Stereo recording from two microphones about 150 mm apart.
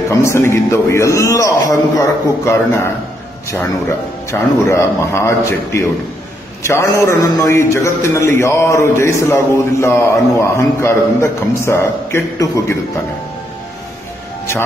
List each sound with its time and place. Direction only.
0.1 s a man's voice: 20° left (ahead or behind)
4.3 s a man's voice: 20° left (ahead or behind)